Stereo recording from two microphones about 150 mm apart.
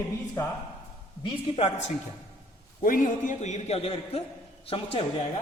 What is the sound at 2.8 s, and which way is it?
A man's voice, 65° left (ahead or behind).